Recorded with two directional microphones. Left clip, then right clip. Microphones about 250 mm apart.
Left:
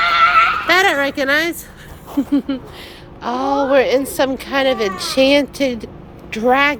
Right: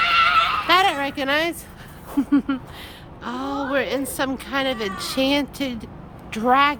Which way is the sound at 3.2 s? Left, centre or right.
Centre.